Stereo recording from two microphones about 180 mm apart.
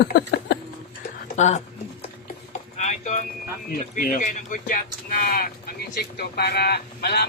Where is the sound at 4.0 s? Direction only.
50° left (ahead or behind).